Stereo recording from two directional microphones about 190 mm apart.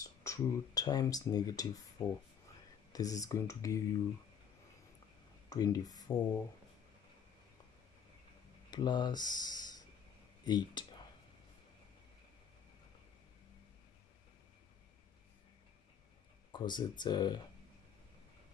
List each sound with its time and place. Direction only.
0.0 s speech: 15° left (ahead or behind)
5.5 s speech: 20° left (ahead or behind)
8.6 s speech: 25° left (ahead or behind)
16.5 s speech: 25° left (ahead or behind)